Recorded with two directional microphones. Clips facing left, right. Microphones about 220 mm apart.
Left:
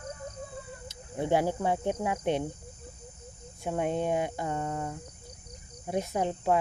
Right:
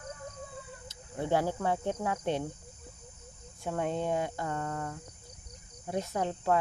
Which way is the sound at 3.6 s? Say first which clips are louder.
Left 3 dB; 15° left (ahead or behind).